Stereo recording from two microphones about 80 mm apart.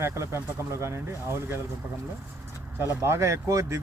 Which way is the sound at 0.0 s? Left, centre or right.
Right.